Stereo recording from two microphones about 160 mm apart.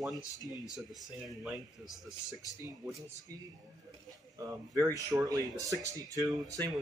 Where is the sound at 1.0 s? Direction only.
Centre (ahead or behind).